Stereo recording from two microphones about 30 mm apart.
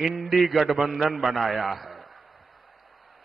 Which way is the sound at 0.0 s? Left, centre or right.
Centre.